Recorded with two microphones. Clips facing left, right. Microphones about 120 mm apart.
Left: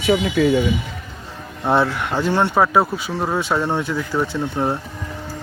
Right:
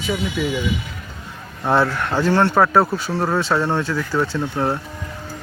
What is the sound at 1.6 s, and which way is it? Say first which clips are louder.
Speech: even; 15° left (ahead or behind).